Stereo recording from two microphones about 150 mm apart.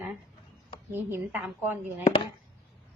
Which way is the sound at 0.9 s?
10° right (ahead or behind).